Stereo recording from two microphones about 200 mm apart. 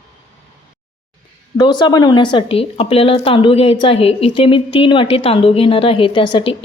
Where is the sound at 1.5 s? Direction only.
20° left (ahead or behind).